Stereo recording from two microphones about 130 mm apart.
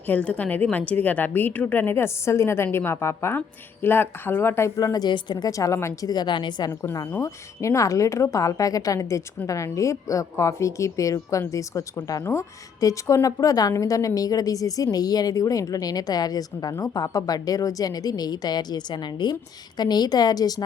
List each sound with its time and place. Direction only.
0.1 s a woman's voice: 10° left (ahead or behind); by 6.7 s 35° left (ahead or behind)
6.7 s a woman's voice: 25° left (ahead or behind)